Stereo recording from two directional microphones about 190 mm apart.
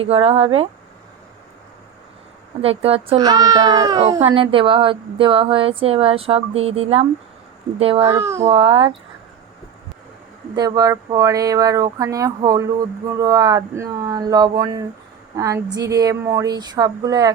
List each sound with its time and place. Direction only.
0.0 s speech: 30° right (ahead or behind)
2.6 s speech: 30° right (ahead or behind)
8.0 s speech: 15° right (ahead or behind)
8.4 s speech: 30° right (ahead or behind)
10.5 s speech: 20° right (ahead or behind)